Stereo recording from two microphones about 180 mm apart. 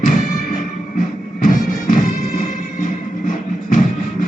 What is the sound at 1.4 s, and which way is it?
Music, 45° left (ahead or behind).